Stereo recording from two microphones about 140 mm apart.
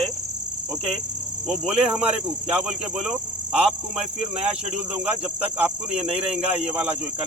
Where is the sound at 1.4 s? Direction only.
5° right (ahead or behind).